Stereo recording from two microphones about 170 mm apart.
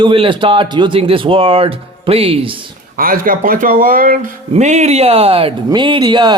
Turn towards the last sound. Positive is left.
turn(degrees=-25)  # may be behind; listen again after turning